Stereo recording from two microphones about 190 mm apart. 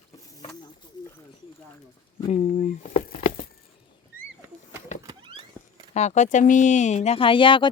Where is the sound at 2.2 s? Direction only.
35° left (ahead or behind).